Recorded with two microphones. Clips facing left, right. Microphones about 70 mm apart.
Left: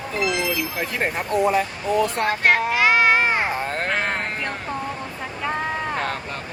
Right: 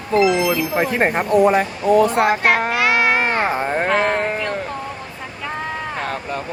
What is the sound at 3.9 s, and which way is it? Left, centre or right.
Speech, centre.